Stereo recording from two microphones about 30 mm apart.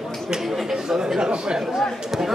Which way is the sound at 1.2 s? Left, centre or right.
Right.